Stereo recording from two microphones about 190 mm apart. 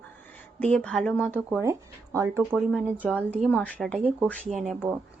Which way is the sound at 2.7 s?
Centre (ahead or behind).